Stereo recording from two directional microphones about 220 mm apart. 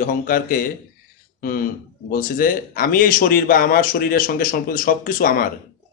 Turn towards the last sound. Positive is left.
turn(degrees=40)  # may be behind; listen again after turning